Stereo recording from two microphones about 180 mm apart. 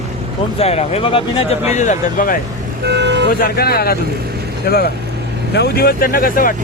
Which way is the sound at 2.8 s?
70° right (ahead or behind).